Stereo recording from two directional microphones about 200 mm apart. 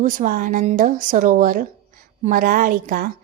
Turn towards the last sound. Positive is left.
turn(degrees=-45)  # may be behind; listen again after turning